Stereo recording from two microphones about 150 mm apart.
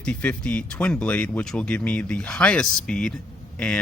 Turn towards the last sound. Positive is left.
turn(degrees=10)  # may be behind; listen again after turning